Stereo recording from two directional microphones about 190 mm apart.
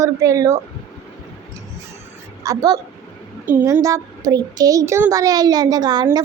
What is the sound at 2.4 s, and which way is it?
Speech, 20° right (ahead or behind).